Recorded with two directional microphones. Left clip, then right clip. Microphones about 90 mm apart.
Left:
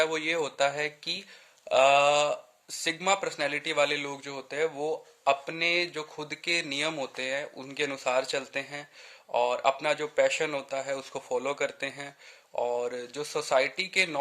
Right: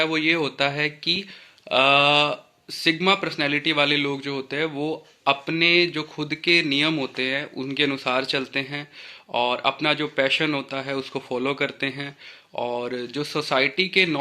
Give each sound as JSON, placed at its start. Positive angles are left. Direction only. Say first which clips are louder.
{"t": 0.0, "sound": "speech", "louder": "right 6 dB", "side_deg": 45}